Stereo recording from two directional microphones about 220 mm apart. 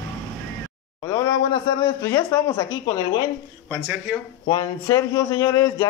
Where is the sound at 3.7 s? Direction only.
5° right (ahead or behind).